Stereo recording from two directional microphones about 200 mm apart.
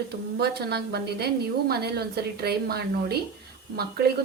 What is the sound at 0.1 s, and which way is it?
A woman's voice, 55° right (ahead or behind).